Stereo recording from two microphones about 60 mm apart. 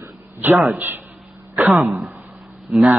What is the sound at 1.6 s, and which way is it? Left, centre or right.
Speech, right.